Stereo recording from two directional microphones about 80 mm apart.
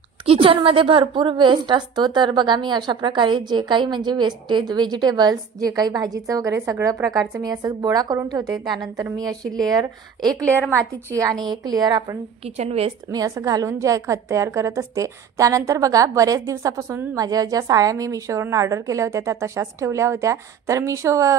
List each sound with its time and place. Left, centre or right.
0.4 s a woman's voice: right
10.5 s a woman's voice: right
11.6 s a woman's voice: right